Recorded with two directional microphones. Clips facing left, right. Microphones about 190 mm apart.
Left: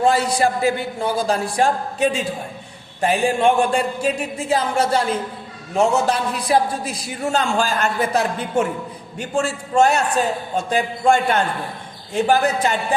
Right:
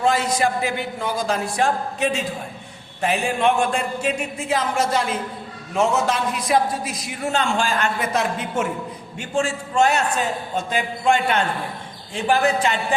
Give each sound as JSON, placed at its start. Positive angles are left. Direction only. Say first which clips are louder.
{"t": 0.0, "sound": "a man's voice", "louder": "left 3 dB", "side_deg": 35}